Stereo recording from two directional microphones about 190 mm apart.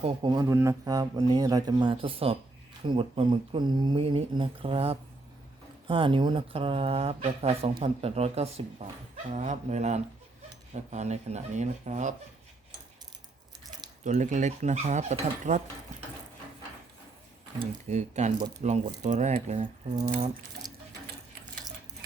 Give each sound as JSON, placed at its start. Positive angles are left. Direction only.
{"t": 0.0, "sound": "speech", "side_deg": -25}
{"t": 14.0, "sound": "speech", "side_deg": -40}
{"t": 17.8, "sound": "speech", "side_deg": -35}